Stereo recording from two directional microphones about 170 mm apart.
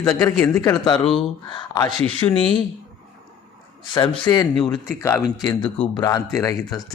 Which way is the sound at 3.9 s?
25° left (ahead or behind).